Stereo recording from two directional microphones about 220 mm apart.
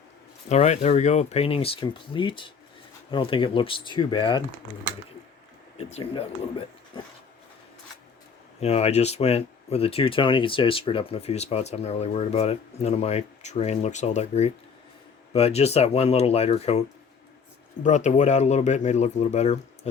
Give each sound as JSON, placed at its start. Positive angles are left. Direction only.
{"t": 0.4, "sound": "speech", "side_deg": 30}
{"t": 5.7, "sound": "speech", "side_deg": 25}
{"t": 8.6, "sound": "speech", "side_deg": 30}
{"t": 17.8, "sound": "speech", "side_deg": 30}